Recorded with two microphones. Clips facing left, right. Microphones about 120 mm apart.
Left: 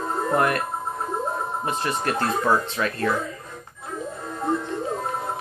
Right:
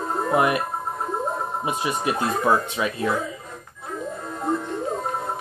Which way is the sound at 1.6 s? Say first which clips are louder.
Right 1 dB; 10° right (ahead or behind).